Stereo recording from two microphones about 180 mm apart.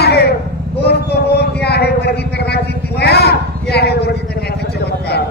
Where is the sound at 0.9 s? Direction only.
65° left (ahead or behind).